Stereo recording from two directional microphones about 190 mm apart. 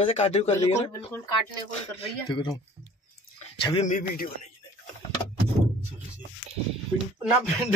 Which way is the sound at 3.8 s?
45° left (ahead or behind).